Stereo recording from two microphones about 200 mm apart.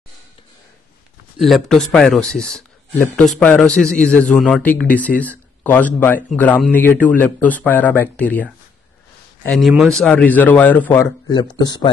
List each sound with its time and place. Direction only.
1.4 s speech: centre (ahead or behind)
11.5 s speech: 20° left (ahead or behind)